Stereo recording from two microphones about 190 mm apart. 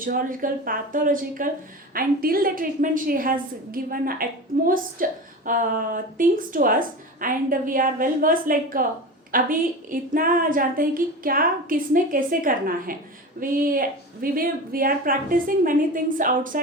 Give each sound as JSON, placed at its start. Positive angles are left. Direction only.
{"t": 0.0, "sound": "a woman's voice", "side_deg": -45}